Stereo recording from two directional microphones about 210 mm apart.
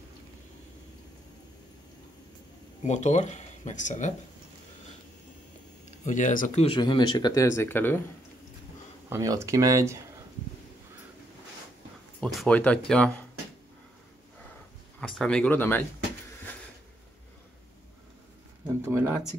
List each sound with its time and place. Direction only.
2.8 s speech: 35° left (ahead or behind)
6.0 s speech: 35° left (ahead or behind); by 8.0 s 10° left (ahead or behind)
9.1 s speech: 15° right (ahead or behind)
12.2 s speech: centre (ahead or behind)
15.0 s speech: 5° left (ahead or behind)
18.8 s a sound: 10° right (ahead or behind)